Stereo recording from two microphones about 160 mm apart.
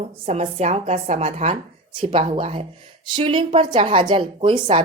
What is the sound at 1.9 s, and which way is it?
A woman's voice, 30° right (ahead or behind).